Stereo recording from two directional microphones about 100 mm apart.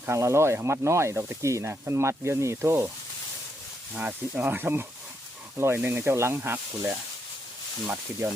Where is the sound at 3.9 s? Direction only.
15° right (ahead or behind).